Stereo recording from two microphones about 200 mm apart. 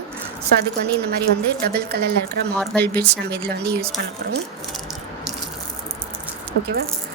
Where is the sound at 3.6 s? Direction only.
50° right (ahead or behind).